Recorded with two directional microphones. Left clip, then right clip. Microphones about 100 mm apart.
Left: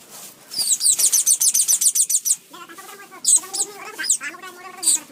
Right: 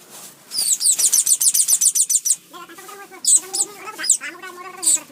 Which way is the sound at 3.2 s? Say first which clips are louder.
Right 1 dB; 5° right (ahead or behind).